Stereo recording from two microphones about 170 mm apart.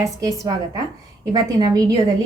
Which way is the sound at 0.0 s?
20° right (ahead or behind).